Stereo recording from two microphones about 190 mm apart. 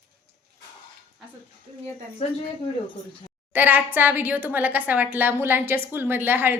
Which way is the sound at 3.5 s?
10° right (ahead or behind).